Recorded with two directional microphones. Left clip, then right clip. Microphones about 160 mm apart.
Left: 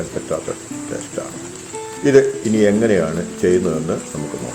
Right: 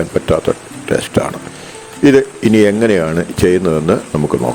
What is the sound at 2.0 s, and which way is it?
Speech, 80° right.